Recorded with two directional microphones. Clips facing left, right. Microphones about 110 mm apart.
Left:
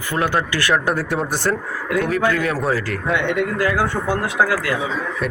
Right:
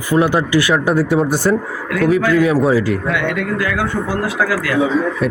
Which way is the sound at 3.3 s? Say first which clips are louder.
Even; 30° left (ahead or behind).